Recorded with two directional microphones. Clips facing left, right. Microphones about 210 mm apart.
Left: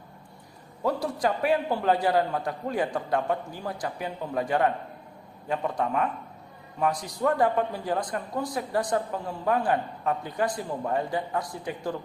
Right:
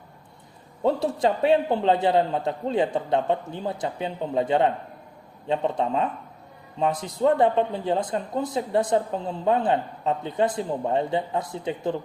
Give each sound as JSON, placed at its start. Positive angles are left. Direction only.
{"t": 0.8, "sound": "a man's voice", "side_deg": -25}